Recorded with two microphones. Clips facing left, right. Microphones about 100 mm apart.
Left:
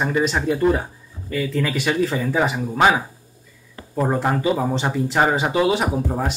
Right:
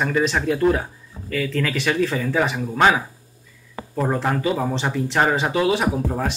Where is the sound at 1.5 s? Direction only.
15° left (ahead or behind).